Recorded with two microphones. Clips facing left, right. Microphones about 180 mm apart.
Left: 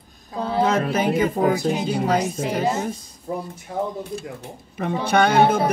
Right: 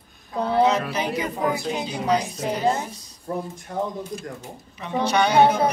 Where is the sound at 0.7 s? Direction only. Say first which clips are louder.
Left 2 dB; 50° left (ahead or behind).